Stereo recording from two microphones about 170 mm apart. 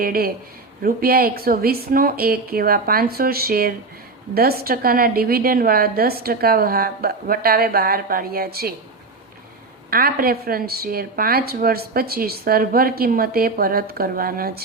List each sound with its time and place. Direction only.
0.0 s speech: 60° right (ahead or behind)
9.9 s speech: 60° right (ahead or behind)